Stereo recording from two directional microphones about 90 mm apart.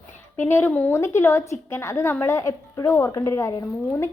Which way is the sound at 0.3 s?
25° left (ahead or behind).